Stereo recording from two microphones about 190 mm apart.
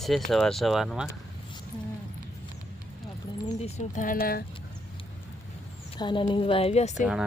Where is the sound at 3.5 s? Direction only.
40° left (ahead or behind).